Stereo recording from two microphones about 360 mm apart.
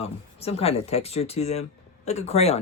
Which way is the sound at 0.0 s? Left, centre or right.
Centre.